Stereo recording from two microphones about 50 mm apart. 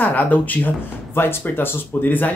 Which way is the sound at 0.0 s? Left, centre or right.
Left.